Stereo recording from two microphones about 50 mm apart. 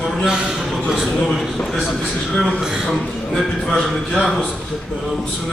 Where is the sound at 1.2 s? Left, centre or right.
Centre.